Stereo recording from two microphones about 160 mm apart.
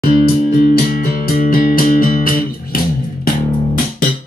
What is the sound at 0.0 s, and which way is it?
Music, 70° left (ahead or behind).